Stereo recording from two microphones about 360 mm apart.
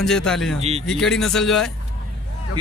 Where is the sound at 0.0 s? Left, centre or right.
Centre.